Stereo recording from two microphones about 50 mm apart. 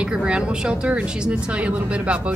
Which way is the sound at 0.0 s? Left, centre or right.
Centre.